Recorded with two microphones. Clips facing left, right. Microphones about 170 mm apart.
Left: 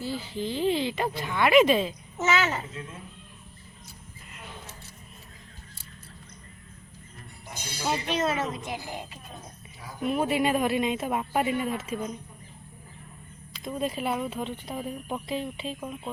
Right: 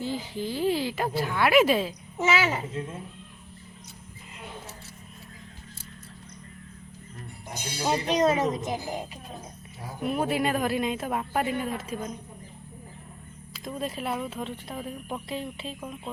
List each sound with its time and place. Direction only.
0.0 s speech: 15° right (ahead or behind)
7.8 s a woman's voice: 35° right (ahead or behind)
8.1 s speech: 20° right (ahead or behind)
8.4 s a woman's voice: 40° right (ahead or behind)
10.0 s speech: centre (ahead or behind)
13.5 s speech: centre (ahead or behind)